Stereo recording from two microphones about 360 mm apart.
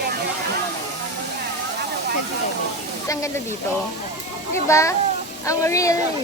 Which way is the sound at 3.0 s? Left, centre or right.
Centre.